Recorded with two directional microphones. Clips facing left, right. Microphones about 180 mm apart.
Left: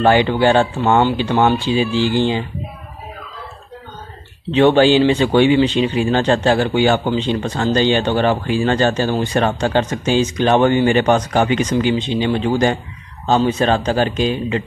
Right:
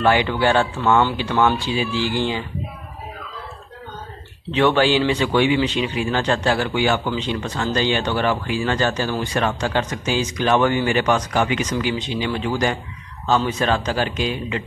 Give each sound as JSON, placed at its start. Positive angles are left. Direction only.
{"t": 0.0, "sound": "a man's voice", "side_deg": 30}
{"t": 4.5, "sound": "a man's voice", "side_deg": 25}